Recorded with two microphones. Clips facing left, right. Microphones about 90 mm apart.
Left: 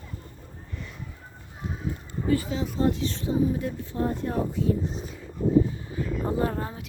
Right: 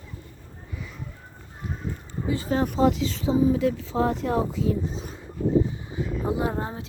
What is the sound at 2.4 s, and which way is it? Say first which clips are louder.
Speech: right 6 dB; 55° right (ahead or behind).